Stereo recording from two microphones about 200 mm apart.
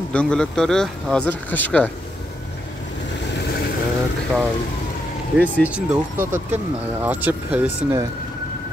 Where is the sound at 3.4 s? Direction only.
50° left (ahead or behind).